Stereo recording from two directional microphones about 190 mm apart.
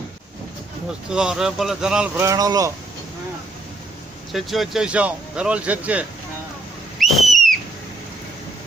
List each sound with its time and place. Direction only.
1.1 s speech: 5° right (ahead or behind)
2.1 s speech: 15° right (ahead or behind)
4.3 s speech: centre (ahead or behind)
7.0 s whistle: centre (ahead or behind)